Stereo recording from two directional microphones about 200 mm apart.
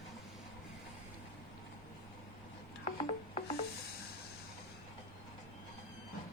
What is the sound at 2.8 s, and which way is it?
Music, 30° left (ahead or behind).